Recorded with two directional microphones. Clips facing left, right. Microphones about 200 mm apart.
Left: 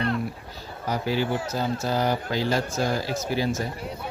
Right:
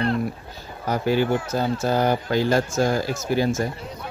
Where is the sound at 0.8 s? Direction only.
50° right (ahead or behind).